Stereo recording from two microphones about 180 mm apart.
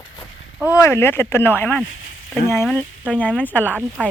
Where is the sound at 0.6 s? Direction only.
15° left (ahead or behind).